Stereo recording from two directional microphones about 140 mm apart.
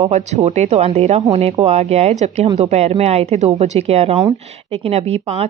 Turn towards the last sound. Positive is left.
turn(degrees=-45)  # may be behind; listen again after turning